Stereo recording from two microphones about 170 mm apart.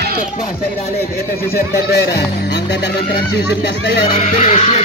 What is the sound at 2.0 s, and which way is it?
Speech, 75° left (ahead or behind).